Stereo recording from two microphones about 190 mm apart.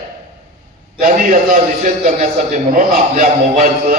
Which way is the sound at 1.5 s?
45° right (ahead or behind).